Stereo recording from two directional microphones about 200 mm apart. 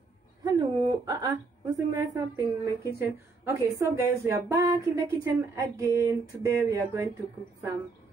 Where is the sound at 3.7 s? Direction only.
15° right (ahead or behind).